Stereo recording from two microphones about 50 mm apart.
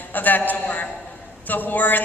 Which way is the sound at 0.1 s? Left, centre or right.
Left.